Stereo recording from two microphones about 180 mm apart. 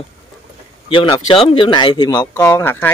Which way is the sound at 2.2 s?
15° left (ahead or behind).